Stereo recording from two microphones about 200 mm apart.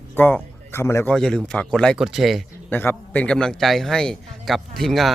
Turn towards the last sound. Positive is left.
turn(degrees=0)  # may be behind; listen again after turning